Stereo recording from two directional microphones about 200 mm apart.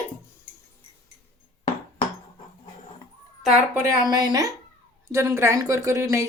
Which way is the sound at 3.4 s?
5° right (ahead or behind).